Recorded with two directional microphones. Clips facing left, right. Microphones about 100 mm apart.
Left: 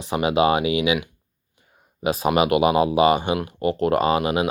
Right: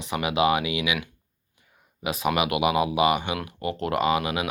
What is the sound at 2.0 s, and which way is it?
Speech, 30° left (ahead or behind).